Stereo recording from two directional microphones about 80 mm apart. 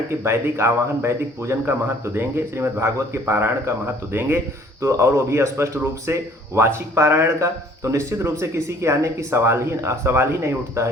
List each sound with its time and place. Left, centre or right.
0.2 s speech: right
4.8 s speech: right